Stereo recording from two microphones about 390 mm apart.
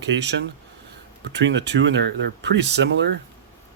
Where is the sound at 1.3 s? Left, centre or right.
Right.